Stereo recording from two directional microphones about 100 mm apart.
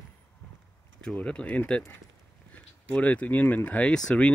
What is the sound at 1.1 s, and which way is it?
Speech, 10° left (ahead or behind).